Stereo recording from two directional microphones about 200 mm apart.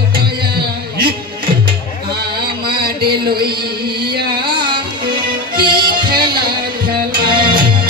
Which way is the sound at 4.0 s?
50° right (ahead or behind).